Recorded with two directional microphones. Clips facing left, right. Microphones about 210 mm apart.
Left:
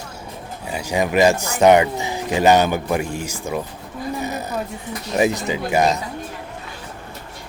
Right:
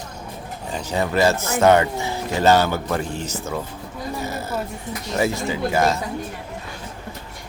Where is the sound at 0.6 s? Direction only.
10° left (ahead or behind).